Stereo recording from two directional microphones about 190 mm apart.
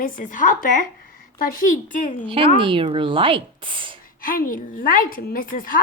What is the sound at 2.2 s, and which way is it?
Speech, 30° right (ahead or behind).